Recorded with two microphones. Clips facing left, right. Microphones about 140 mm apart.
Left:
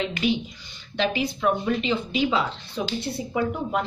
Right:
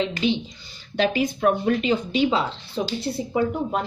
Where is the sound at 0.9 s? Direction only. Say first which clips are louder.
Right 3 dB; 45° right (ahead or behind).